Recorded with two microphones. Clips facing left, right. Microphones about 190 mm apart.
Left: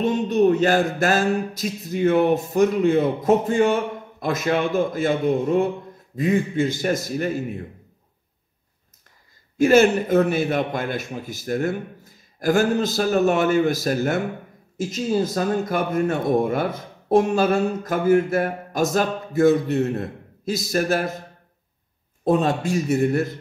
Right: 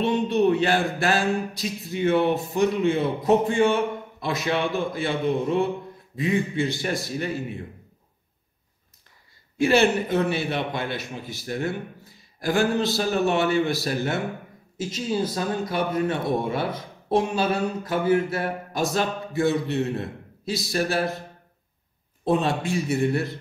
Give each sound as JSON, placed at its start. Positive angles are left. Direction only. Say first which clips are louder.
{"t": 0.0, "sound": "a man's voice", "louder": "left 2 dB", "side_deg": 45}
{"t": 9.6, "sound": "a man's voice", "louder": "left 4 dB", "side_deg": 45}
{"t": 22.2, "sound": "a man's voice", "louder": "left 3 dB", "side_deg": 45}